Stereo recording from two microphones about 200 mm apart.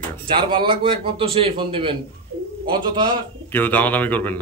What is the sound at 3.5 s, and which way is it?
Speech, 10° left (ahead or behind).